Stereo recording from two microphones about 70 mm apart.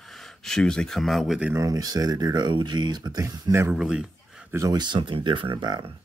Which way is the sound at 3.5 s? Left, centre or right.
Right.